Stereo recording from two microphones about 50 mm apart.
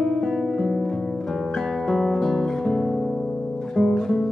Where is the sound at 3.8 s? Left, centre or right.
Centre.